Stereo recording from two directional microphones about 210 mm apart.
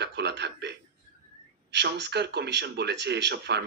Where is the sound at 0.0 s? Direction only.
55° right (ahead or behind).